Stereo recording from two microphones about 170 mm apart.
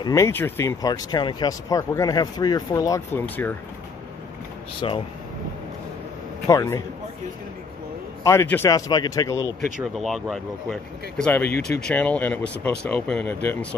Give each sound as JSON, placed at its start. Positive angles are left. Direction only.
{"t": 0.0, "sound": "speech", "side_deg": 20}
{"t": 4.8, "sound": "speech", "side_deg": 30}
{"t": 6.4, "sound": "speech", "side_deg": 20}
{"t": 8.2, "sound": "speech", "side_deg": 15}
{"t": 9.9, "sound": "speech", "side_deg": 0}